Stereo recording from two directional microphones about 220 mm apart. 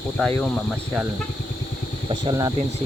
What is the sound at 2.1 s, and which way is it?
Speech, 20° right (ahead or behind).